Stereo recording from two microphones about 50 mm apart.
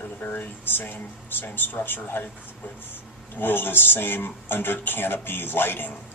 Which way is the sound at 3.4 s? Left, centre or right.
Left.